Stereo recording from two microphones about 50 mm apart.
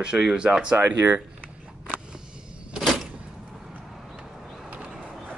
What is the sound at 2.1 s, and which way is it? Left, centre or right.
Vehicle, centre.